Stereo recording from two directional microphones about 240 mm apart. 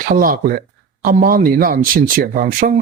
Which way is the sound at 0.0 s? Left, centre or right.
Right.